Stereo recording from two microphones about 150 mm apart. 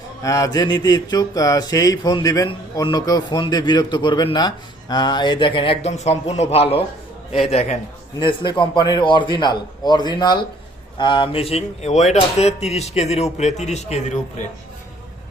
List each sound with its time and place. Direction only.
0.2 s a man's voice: 20° left (ahead or behind)
5.9 s speech: 50° left (ahead or behind)
8.2 s a man's voice: 35° left (ahead or behind); by 14.2 s 50° left (ahead or behind)